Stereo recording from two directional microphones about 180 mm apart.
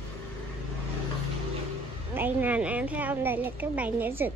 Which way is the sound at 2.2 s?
10° right (ahead or behind).